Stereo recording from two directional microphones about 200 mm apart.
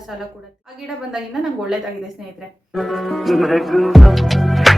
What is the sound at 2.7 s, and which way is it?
Speech, centre (ahead or behind).